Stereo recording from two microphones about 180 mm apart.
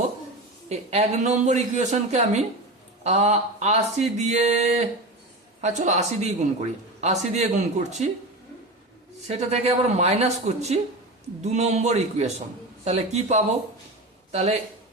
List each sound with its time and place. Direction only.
0.7 s speech: 35° right (ahead or behind)
9.2 s speech: 35° right (ahead or behind)